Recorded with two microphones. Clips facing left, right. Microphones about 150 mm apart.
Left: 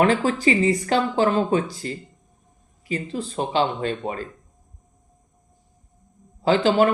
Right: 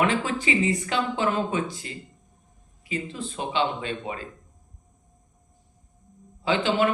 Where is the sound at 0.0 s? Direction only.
40° left (ahead or behind).